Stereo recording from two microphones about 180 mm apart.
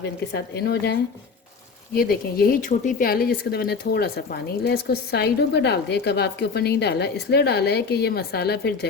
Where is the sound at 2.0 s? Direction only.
55° left (ahead or behind).